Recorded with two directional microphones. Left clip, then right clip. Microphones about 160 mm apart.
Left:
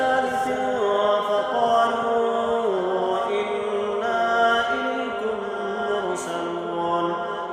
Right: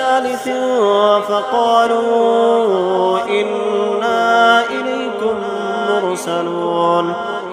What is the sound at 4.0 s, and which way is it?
Music, 30° right (ahead or behind).